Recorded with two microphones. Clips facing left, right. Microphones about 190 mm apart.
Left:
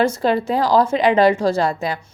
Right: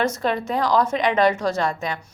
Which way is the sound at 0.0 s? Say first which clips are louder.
Left 5 dB; 30° left (ahead or behind).